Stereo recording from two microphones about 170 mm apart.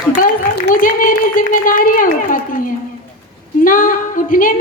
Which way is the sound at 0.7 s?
55° left (ahead or behind).